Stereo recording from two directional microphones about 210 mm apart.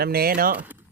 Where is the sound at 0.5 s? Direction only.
5° right (ahead or behind).